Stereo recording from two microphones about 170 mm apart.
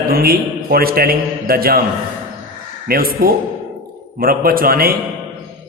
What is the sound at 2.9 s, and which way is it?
A man's voice, 60° right (ahead or behind).